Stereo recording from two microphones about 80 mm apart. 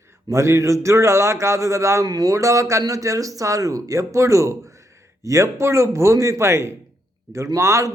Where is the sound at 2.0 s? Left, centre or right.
Right.